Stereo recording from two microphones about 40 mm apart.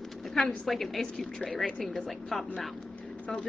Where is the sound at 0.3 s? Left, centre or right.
Centre.